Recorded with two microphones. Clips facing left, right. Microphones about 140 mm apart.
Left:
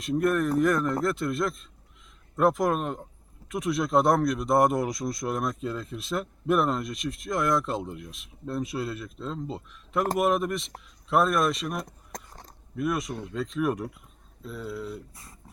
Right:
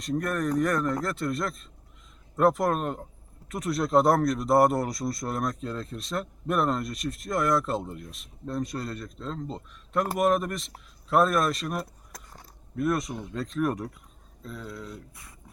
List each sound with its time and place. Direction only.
0.0 s speech: 5° left (ahead or behind)
15.1 s speech: 25° left (ahead or behind)